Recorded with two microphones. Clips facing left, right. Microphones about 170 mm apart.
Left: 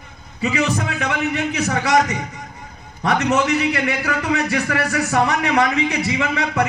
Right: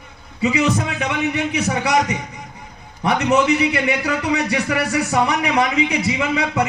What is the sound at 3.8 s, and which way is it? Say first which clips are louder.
Speech: right 1 dB; 20° right (ahead or behind).